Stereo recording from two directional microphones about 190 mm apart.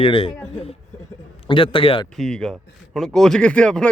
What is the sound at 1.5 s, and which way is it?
Speech, 25° left (ahead or behind).